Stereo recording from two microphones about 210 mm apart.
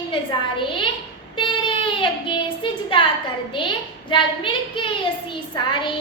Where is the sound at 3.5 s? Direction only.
20° left (ahead or behind).